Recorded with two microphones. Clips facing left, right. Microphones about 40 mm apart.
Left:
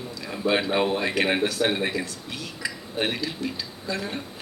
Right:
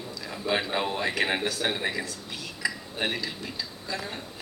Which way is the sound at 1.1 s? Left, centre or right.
Centre.